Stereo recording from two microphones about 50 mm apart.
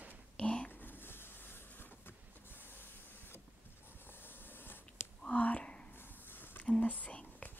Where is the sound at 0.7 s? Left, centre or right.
Left.